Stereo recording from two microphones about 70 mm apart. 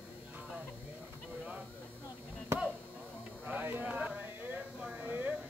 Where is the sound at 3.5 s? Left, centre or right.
Right.